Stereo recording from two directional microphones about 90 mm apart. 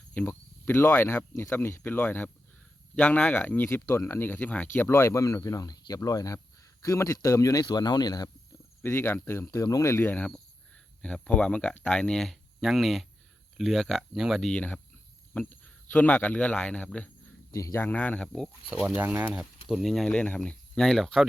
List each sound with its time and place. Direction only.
0.1 s speech: 20° left (ahead or behind)
3.8 s speech: 30° left (ahead or behind)
4.9 s speech: 30° left (ahead or behind)
7.7 s speech: 50° left (ahead or behind)
8.8 s speech: 25° left (ahead or behind); by 14.5 s 5° right (ahead or behind)
14.5 s speech: 15° left (ahead or behind)
17.5 s speech: 35° left (ahead or behind)
17.8 s speech: 15° left (ahead or behind)
18.3 s speech: centre (ahead or behind)
18.9 s speech: 20° right (ahead or behind)
19.6 s speech: centre (ahead or behind)
20.1 s speech: 15° left (ahead or behind)